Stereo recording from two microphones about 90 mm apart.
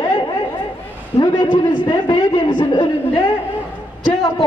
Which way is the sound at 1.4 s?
65° left (ahead or behind).